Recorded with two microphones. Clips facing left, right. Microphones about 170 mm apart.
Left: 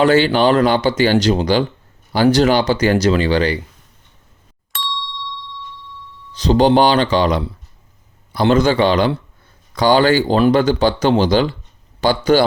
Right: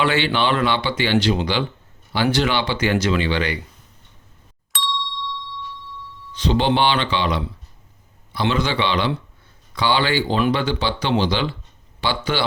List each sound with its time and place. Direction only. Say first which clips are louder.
0.0 s speech: left 7 dB; 40° left (ahead or behind)
4.7 s ding: even; centre (ahead or behind)
6.3 s speech: left 7 dB; 40° left (ahead or behind)